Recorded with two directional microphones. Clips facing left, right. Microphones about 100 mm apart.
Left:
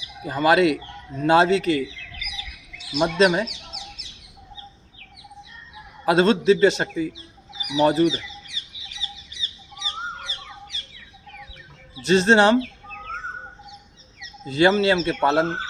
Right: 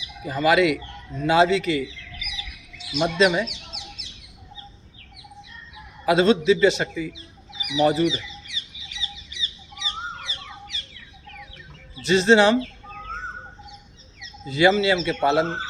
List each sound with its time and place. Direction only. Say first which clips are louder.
0.4 s a man's voice: left 1 dB; 40° left (ahead or behind)
2.9 s a man's voice: left 1 dB; 45° left (ahead or behind)
6.1 s a man's voice: left 1 dB; 40° left (ahead or behind)
8.9 s fowl: right 1 dB; 40° left (ahead or behind)
12.0 s a man's voice: even; 45° left (ahead or behind)
14.5 s a man's voice: left 1 dB; 40° left (ahead or behind)